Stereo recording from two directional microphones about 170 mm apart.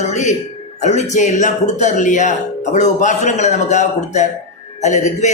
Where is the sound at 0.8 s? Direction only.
40° left (ahead or behind).